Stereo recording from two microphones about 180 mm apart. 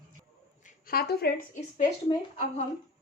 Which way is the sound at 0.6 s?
55° left (ahead or behind).